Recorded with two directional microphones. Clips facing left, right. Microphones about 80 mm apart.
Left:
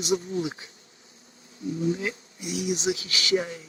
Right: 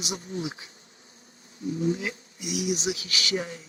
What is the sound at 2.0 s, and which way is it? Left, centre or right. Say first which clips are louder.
Speech: left 2 dB; left.